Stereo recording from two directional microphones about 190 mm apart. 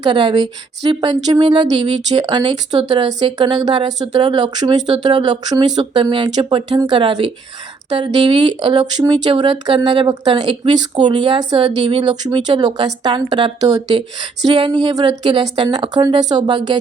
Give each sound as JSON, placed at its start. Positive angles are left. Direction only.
{"t": 0.0, "sound": "speech", "side_deg": -25}